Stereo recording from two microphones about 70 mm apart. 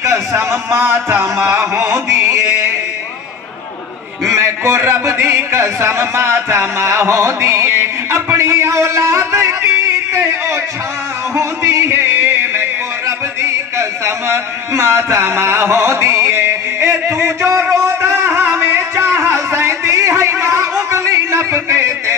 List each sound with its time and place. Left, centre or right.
0.0 s speech: right
4.3 s a sound: right
16.8 s music: right